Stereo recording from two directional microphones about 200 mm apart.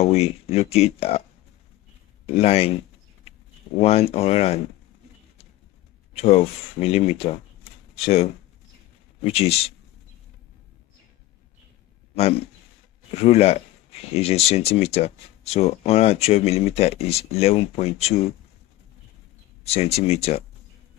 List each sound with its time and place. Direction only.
0.0 s speech: 30° left (ahead or behind)
2.2 s speech: 30° left (ahead or behind)
6.1 s speech: 30° left (ahead or behind)
12.2 s speech: 30° left (ahead or behind)
19.6 s speech: 30° left (ahead or behind)